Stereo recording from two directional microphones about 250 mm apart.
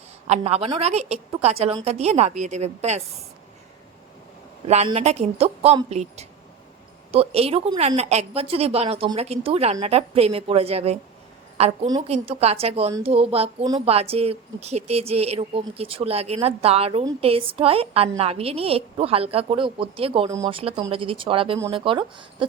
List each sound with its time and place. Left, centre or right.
0.3 s a woman's voice: right
4.7 s a woman's voice: right